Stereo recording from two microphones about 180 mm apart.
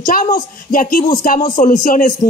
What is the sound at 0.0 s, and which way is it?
Speech, 50° left (ahead or behind).